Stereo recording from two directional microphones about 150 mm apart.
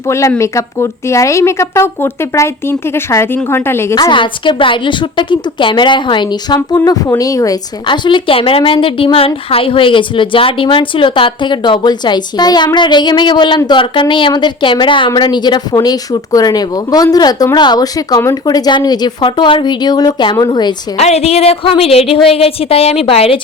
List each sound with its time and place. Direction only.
0.1 s a woman's voice: 20° left (ahead or behind)
3.9 s a woman's voice: 30° left (ahead or behind)
21.0 s a woman's voice: 45° left (ahead or behind)